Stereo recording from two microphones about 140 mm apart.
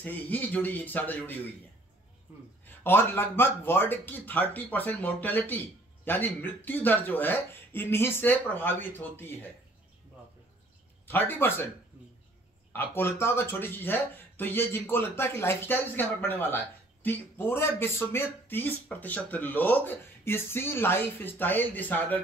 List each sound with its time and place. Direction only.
0.0 s speech: 10° left (ahead or behind)
2.6 s speech: 15° left (ahead or behind)
11.1 s speech: 15° left (ahead or behind)
12.7 s speech: 15° left (ahead or behind)